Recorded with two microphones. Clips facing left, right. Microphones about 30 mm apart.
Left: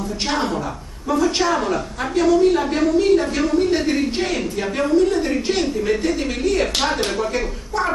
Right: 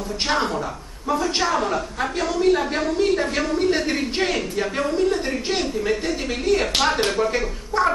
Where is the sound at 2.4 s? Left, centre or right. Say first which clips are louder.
Left 3 dB; centre.